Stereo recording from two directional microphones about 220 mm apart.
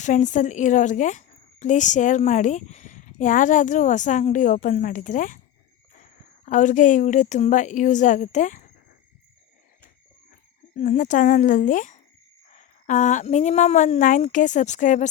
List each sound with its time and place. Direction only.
0.0 s a woman's voice: 35° left (ahead or behind)
10.8 s a woman's voice: 35° left (ahead or behind)